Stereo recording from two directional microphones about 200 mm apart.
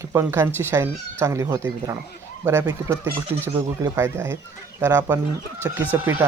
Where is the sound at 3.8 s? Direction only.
10° right (ahead or behind).